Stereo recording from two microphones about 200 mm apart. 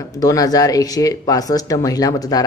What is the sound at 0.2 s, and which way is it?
Speech, 20° left (ahead or behind).